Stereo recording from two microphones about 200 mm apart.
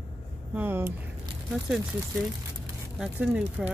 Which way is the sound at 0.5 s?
10° right (ahead or behind).